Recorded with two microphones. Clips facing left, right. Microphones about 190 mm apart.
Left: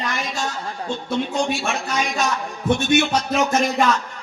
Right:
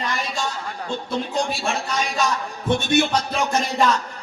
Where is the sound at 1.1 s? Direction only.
35° right (ahead or behind).